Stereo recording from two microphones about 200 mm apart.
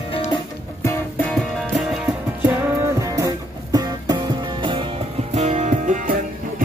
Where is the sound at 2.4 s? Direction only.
15° right (ahead or behind).